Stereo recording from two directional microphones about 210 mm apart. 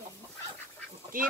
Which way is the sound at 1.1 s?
40° right (ahead or behind).